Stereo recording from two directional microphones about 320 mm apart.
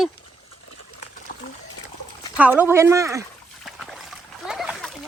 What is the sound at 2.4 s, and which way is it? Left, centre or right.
Speech, centre.